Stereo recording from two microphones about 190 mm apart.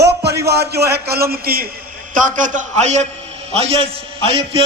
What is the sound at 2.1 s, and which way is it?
A man's voice, 40° right (ahead or behind).